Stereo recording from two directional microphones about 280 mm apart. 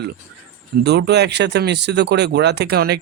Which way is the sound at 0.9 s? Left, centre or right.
Right.